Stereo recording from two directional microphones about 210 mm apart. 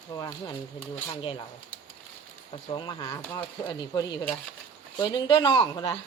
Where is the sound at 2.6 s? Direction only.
20° left (ahead or behind).